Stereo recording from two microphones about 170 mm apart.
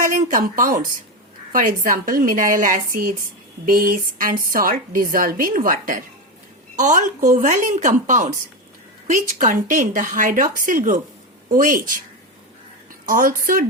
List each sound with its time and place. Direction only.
0.0 s a woman's voice: 50° right (ahead or behind)
13.1 s a woman's voice: 55° right (ahead or behind)